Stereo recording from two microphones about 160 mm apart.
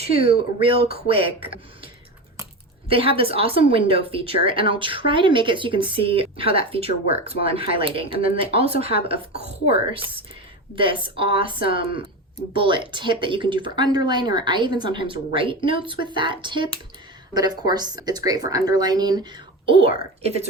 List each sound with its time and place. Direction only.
0.0 s speech: 40° right (ahead or behind)
2.9 s speech: 35° right (ahead or behind)
10.8 s speech: 35° right (ahead or behind)